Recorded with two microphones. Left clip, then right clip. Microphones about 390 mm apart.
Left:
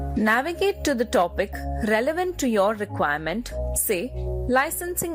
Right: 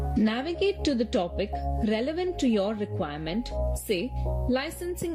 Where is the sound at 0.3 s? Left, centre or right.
Centre.